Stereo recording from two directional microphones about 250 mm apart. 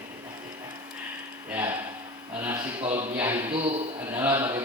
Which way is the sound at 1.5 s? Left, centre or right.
Centre.